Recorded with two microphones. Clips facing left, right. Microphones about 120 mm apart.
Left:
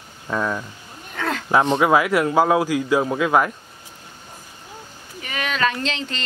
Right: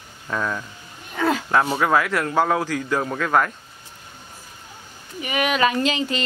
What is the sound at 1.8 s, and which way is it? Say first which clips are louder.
Speech: left 3 dB; 10° left (ahead or behind).